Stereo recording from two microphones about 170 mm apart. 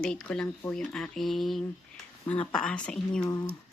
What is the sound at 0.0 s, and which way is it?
Speech, 5° left (ahead or behind).